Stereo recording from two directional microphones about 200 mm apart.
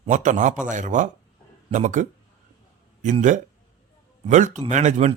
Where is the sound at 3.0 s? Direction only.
40° right (ahead or behind).